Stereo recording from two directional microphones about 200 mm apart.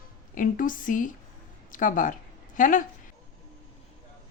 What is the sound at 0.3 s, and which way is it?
A woman's voice, 45° left (ahead or behind).